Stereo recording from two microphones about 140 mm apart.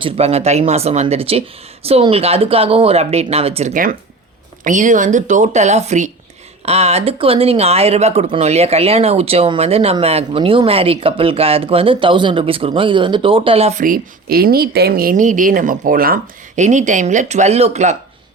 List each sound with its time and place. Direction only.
0.0 s speech: 45° right (ahead or behind)
4.6 s speech: 65° right (ahead or behind); by 13.7 s 45° right (ahead or behind)
13.7 s speech: 85° right; by 17.9 s 50° right (ahead or behind)